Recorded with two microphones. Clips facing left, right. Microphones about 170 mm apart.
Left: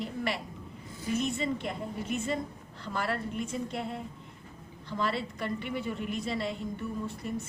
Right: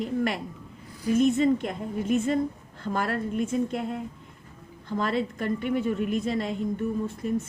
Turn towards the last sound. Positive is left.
turn(degrees=-45)  # may be behind; listen again after turning